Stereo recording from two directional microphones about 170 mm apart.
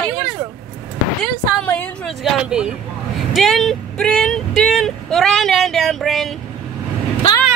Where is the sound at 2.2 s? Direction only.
5° right (ahead or behind).